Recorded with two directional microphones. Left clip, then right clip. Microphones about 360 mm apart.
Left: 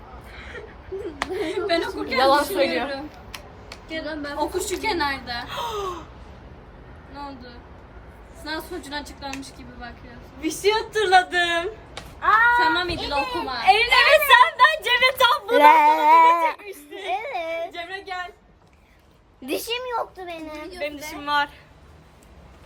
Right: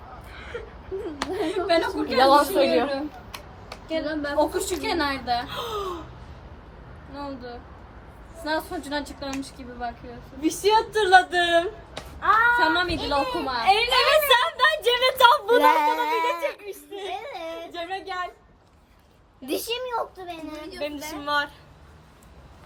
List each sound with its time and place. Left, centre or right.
1.3 s a woman's voice: centre
2.1 s a woman's voice: centre
2.4 s a woman's voice: centre
3.8 s a woman's voice: centre
5.5 s a woman's voice: centre
7.1 s a woman's voice: centre
10.4 s a woman's voice: centre
12.2 s a sound: centre
12.6 s a woman's voice: centre
13.6 s a woman's voice: centre
17.7 s child singing: centre
19.5 s a woman's voice: centre
20.7 s a woman's voice: centre